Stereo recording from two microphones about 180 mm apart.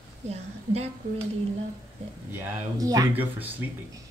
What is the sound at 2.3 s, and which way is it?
Speech, 20° right (ahead or behind).